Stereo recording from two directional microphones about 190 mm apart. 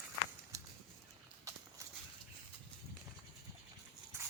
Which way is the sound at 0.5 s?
15° right (ahead or behind).